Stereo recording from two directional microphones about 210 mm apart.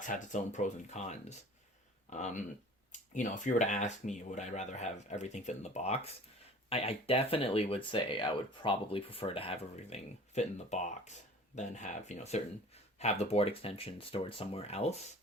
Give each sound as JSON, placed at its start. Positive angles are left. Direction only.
{"t": 0.0, "sound": "speech", "side_deg": 35}